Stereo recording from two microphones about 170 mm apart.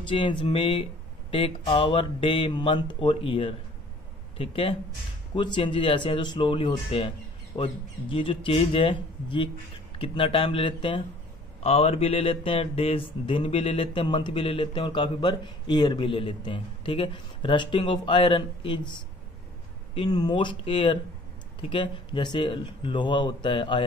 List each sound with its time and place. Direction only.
0.1 s speech: 30° left (ahead or behind)